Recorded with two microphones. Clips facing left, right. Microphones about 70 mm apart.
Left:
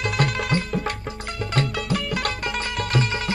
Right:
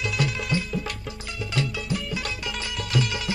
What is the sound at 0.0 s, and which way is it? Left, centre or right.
Music, left.